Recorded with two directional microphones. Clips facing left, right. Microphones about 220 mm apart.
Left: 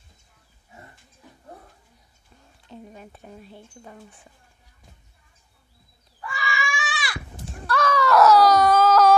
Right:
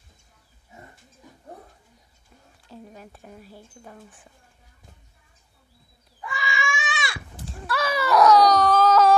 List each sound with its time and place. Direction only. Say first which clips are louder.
2.7 s a sound: left 1 dB; centre (ahead or behind)
3.8 s speech: left 1 dB; centre (ahead or behind)
6.2 s goat: even; 20° right (ahead or behind)
7.4 s wail: left 3 dB; 5° right (ahead or behind)